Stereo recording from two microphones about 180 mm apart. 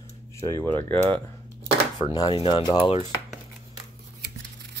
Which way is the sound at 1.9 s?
20° left (ahead or behind).